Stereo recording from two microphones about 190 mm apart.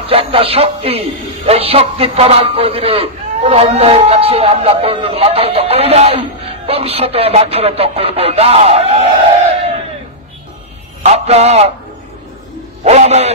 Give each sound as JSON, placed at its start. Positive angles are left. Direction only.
{"t": 0.0, "sound": "a man's voice", "side_deg": -30}
{"t": 11.0, "sound": "a man's voice", "side_deg": -35}
{"t": 12.8, "sound": "a man's voice", "side_deg": -35}